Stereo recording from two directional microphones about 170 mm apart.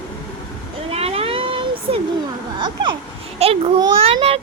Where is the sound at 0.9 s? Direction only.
35° right (ahead or behind).